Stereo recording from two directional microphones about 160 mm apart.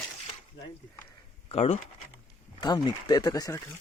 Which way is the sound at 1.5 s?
40° left (ahead or behind).